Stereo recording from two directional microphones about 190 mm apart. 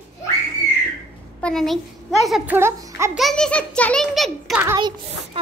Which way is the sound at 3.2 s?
5° left (ahead or behind).